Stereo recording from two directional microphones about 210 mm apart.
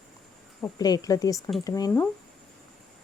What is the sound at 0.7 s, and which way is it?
Speech, 20° left (ahead or behind).